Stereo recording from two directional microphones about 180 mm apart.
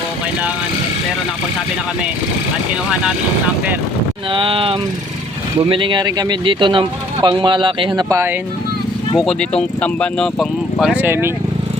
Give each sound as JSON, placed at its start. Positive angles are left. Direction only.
{"t": 4.3, "sound": "speech", "side_deg": -30}
{"t": 9.1, "sound": "speech", "side_deg": 5}